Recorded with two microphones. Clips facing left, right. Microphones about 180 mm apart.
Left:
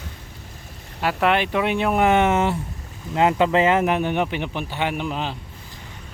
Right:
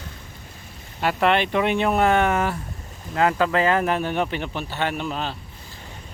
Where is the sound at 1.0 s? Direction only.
5° left (ahead or behind).